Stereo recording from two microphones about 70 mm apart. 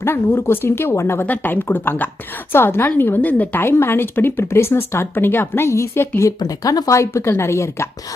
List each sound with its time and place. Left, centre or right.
0.0 s a woman's voice: left
1.3 s a woman's voice: left
6.4 s speech: left